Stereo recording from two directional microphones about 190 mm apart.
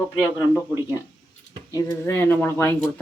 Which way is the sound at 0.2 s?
15° left (ahead or behind).